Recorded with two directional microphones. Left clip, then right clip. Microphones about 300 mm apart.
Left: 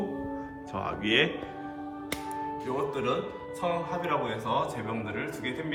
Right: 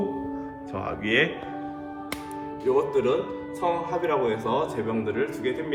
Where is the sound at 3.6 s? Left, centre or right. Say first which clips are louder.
Right 5 dB; centre.